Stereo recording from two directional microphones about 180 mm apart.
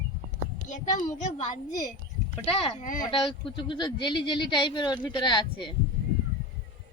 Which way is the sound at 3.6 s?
25° left (ahead or behind).